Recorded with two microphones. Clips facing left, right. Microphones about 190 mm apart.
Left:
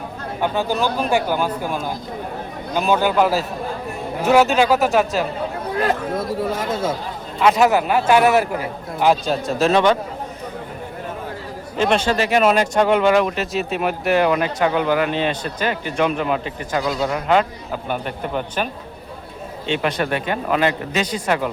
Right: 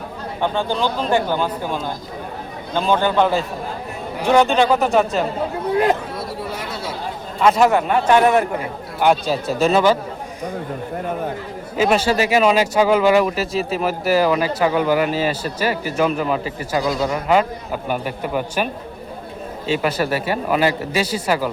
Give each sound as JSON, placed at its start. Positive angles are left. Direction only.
{"t": 0.4, "sound": "speech", "side_deg": 5}
{"t": 6.1, "sound": "speech", "side_deg": 45}
{"t": 7.3, "sound": "speech", "side_deg": 0}
{"t": 11.8, "sound": "speech", "side_deg": -5}